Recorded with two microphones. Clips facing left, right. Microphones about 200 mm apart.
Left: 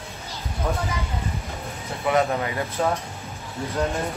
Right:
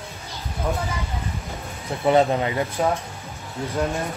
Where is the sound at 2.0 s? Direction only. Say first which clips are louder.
Right 4 dB; 25° right (ahead or behind).